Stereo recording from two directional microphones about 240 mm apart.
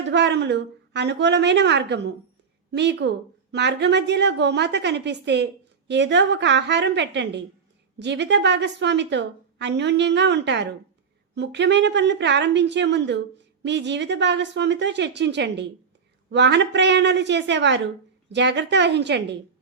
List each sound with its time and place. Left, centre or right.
0.1 s a woman's voice: right